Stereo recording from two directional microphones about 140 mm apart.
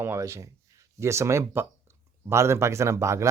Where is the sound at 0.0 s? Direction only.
20° right (ahead or behind).